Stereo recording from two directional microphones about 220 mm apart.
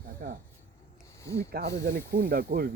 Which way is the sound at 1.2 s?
15° left (ahead or behind).